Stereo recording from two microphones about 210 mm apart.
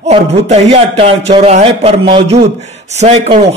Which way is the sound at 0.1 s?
30° right (ahead or behind).